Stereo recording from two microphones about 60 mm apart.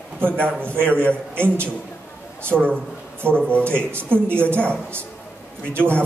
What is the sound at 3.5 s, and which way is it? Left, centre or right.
Speech, left.